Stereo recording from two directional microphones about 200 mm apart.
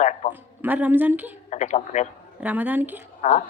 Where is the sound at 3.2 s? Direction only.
35° left (ahead or behind).